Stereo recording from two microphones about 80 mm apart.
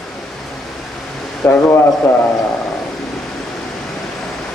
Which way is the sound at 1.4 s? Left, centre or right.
Left.